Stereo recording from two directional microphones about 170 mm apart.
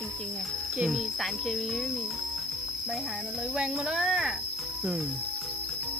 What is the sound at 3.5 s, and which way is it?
Speech, 5° right (ahead or behind).